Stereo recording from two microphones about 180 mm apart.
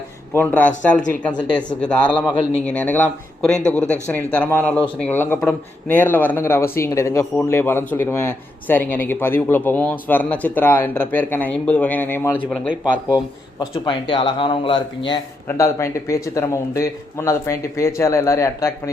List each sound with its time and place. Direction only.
0.3 s speech: 10° left (ahead or behind)
0.9 s speech: 45° left (ahead or behind)
1.3 s speech: 5° left (ahead or behind)
12.5 s speech: 5° right (ahead or behind)
13.1 s a man's voice: 25° left (ahead or behind)
15.4 s speech: 15° left (ahead or behind)